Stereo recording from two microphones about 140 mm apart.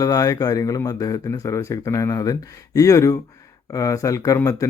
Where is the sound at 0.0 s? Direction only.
25° left (ahead or behind).